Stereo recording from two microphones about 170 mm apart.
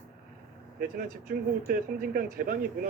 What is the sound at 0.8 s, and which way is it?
Speech, 60° right (ahead or behind).